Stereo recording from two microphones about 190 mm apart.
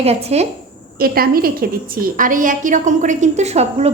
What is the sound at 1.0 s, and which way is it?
A woman's voice, 50° right (ahead or behind).